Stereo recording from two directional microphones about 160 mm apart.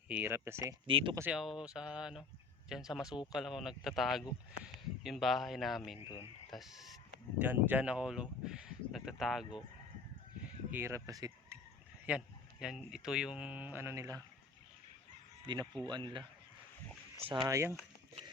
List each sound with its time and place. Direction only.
0.1 s speech: 15° right (ahead or behind)
0.9 s speech: 35° right (ahead or behind)
1.3 s speech: 5° right (ahead or behind)
6.0 s speech: 30° left (ahead or behind)
6.5 s speech: centre (ahead or behind)
10.7 s speech: 15° right (ahead or behind)
12.0 s speech: 5° right (ahead or behind)
15.9 s speech: 30° right (ahead or behind)